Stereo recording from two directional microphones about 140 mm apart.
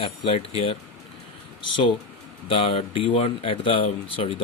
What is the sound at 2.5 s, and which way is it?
Speech, 40° left (ahead or behind).